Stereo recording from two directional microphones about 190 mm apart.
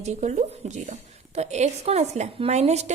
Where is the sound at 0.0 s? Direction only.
35° right (ahead or behind).